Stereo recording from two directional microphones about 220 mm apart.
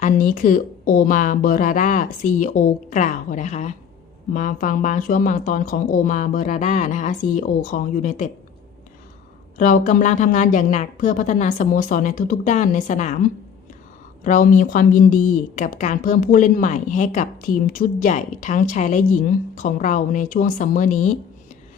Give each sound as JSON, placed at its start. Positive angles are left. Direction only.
{"t": 0.0, "sound": "a woman's voice", "side_deg": 35}
{"t": 9.6, "sound": "a woman's voice", "side_deg": 35}